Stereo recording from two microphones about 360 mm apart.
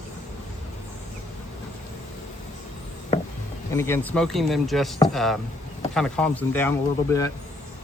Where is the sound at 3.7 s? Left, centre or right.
Centre.